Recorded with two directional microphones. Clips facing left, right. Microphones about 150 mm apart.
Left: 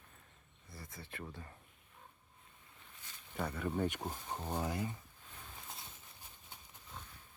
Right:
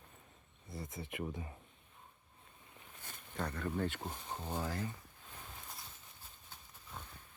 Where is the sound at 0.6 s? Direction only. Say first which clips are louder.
Right 7 dB; 25° right (ahead or behind).